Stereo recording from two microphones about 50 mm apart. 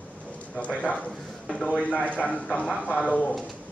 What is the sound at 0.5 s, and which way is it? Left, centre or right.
Speech, left.